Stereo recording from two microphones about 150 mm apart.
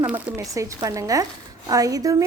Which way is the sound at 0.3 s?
20° right (ahead or behind).